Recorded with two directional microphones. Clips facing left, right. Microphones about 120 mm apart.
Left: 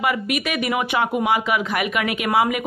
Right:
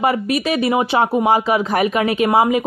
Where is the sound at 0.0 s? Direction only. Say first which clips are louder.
Right 5 dB; 35° right (ahead or behind).